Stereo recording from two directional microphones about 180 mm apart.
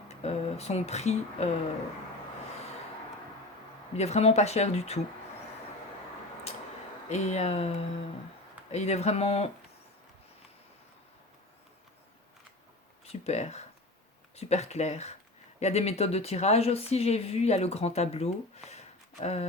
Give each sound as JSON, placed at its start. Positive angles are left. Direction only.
{"t": 0.1, "sound": "speech", "side_deg": 35}
{"t": 3.9, "sound": "a woman's voice", "side_deg": 35}
{"t": 7.1, "sound": "a woman's voice", "side_deg": 40}
{"t": 13.1, "sound": "a woman's voice", "side_deg": 35}